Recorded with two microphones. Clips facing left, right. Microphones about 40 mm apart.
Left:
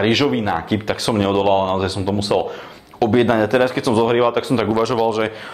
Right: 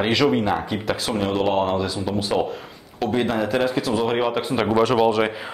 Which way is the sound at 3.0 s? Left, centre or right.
Centre.